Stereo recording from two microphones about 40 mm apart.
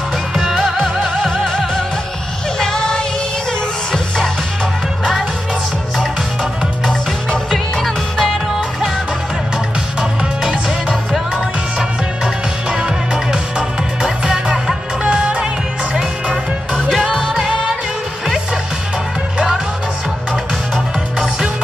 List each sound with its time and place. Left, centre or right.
0.3 s music: centre
2.6 s music: centre
7.5 s music: centre
8.3 s music: centre
12.7 s music: centre
17.1 s music: centre
19.3 s music: centre